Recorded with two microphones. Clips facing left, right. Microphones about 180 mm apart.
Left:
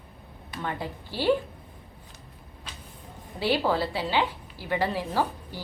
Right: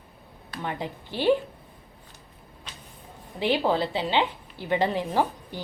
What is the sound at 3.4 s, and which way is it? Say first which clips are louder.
A woman's voice: right 1 dB; 20° right (ahead or behind).